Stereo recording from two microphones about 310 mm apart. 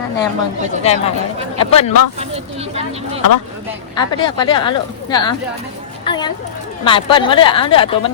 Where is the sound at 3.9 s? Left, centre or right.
Centre.